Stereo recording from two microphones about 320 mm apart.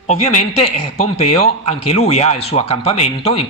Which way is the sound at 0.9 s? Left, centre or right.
Centre.